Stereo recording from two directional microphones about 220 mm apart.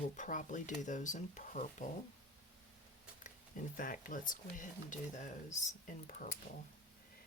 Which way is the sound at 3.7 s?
40° left (ahead or behind).